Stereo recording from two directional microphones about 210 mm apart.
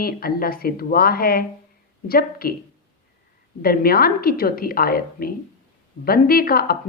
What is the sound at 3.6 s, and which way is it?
A woman's voice, 45° left (ahead or behind).